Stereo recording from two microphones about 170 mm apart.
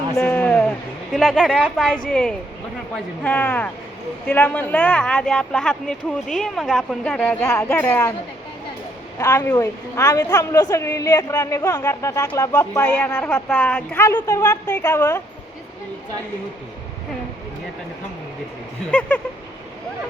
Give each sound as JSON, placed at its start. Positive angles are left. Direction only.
{"t": 0.2, "sound": "a sound", "side_deg": 10}
{"t": 1.1, "sound": "a woman's voice", "side_deg": 0}
{"t": 9.1, "sound": "a woman's voice", "side_deg": 15}
{"t": 18.9, "sound": "a woman's voice", "side_deg": 10}